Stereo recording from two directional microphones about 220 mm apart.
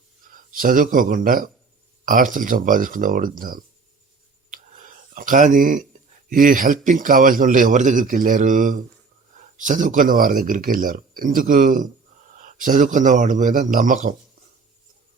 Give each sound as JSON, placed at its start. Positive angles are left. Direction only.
{"t": 0.2, "sound": "a man's voice", "side_deg": -40}
{"t": 4.5, "sound": "a sound", "side_deg": -35}
{"t": 6.3, "sound": "a man's voice", "side_deg": -40}